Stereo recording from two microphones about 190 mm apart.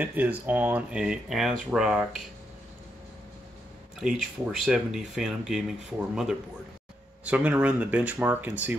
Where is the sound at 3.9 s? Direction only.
Centre (ahead or behind).